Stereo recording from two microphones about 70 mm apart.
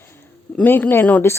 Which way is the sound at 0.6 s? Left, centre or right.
Left.